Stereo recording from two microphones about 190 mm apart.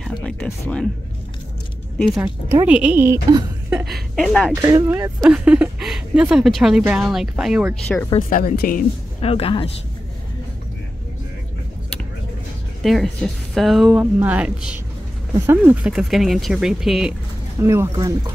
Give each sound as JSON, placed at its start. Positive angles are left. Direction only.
{"t": 0.0, "sound": "speech", "side_deg": 5}
{"t": 2.0, "sound": "a woman's voice", "side_deg": 0}
{"t": 3.7, "sound": "speech", "side_deg": 0}
{"t": 4.6, "sound": "speech", "side_deg": -20}
{"t": 8.2, "sound": "speech", "side_deg": 45}
{"t": 9.2, "sound": "a woman's voice", "side_deg": 30}
{"t": 12.8, "sound": "speech", "side_deg": 0}
{"t": 17.6, "sound": "a woman's voice", "side_deg": -15}